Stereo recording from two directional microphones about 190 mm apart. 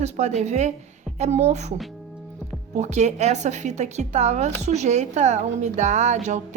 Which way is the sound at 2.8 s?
35° right (ahead or behind).